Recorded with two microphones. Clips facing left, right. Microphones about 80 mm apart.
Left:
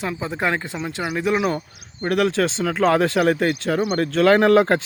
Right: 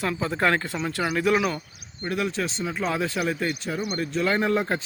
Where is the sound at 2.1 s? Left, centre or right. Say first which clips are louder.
Left 8 dB; left.